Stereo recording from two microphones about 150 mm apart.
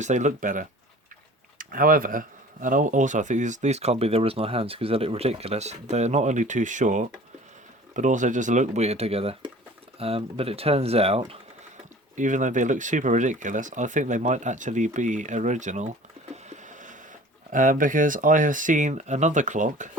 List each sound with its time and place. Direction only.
0.0 s speech: 55° right (ahead or behind)
12.1 s speech: 55° right (ahead or behind)
16.3 s a sound: 55° right (ahead or behind)
17.5 s speech: 65° right (ahead or behind)